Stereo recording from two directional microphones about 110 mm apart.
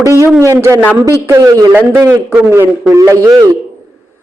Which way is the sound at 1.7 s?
15° right (ahead or behind).